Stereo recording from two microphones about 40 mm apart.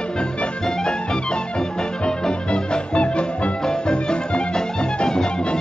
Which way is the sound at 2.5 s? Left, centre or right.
Left.